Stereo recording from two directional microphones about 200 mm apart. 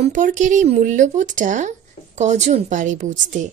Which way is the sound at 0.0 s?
40° right (ahead or behind).